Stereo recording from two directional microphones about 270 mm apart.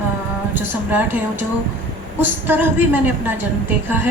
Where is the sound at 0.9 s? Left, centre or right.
Centre.